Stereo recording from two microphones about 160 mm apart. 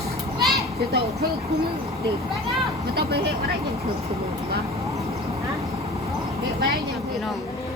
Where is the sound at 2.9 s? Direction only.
80° right.